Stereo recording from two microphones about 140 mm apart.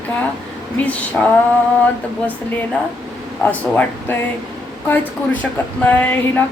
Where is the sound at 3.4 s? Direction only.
10° left (ahead or behind).